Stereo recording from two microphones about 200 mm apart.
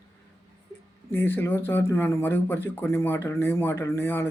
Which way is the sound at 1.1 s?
10° left (ahead or behind).